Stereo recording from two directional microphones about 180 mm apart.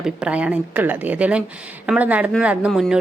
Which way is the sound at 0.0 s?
5° right (ahead or behind).